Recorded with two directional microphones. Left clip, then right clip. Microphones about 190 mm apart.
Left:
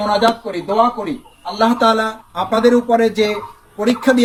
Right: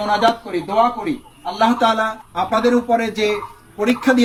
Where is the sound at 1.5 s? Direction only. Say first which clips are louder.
Left 2 dB; 45° left (ahead or behind).